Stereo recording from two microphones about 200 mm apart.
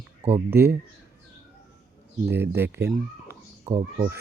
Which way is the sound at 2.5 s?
10° right (ahead or behind).